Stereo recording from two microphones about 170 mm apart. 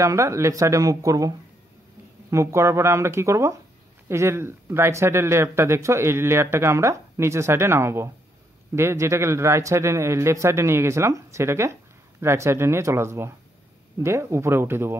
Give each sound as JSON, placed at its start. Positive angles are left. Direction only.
{"t": 0.0, "sound": "speech", "side_deg": -15}
{"t": 2.3, "sound": "a man's voice", "side_deg": -15}